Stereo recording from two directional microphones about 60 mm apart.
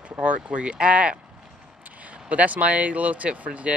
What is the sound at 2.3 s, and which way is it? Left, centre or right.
Speech, right.